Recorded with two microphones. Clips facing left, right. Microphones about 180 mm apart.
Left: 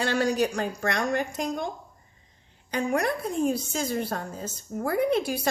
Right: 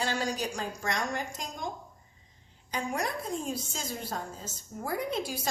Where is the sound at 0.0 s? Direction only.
65° left (ahead or behind).